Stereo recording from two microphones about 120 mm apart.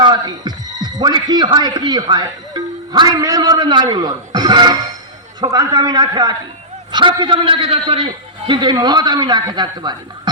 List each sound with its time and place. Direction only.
0.0 s a man's voice: 35° right (ahead or behind)